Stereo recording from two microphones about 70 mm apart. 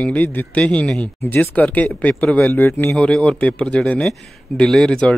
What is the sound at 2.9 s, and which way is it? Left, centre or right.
Speech, centre.